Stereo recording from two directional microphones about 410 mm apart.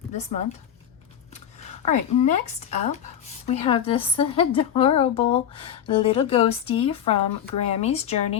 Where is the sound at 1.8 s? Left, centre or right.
Centre.